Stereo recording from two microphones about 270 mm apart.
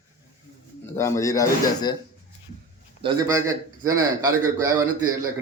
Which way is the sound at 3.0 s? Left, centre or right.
Centre.